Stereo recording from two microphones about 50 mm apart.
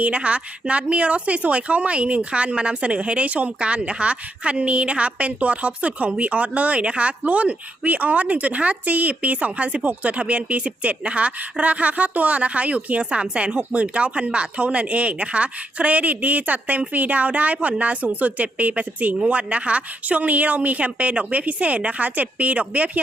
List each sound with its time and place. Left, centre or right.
0.0 s a woman's voice: right